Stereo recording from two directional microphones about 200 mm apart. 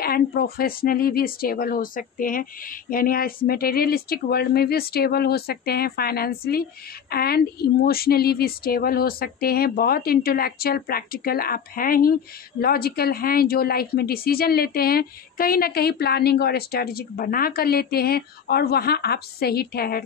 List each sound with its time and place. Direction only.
0.0 s a woman's voice: 50° left (ahead or behind)